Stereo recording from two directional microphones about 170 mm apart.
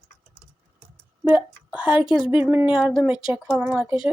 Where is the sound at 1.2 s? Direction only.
10° right (ahead or behind).